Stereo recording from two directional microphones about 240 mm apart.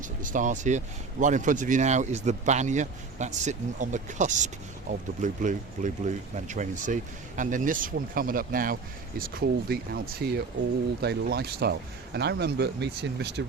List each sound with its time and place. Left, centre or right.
0.0 s speech: right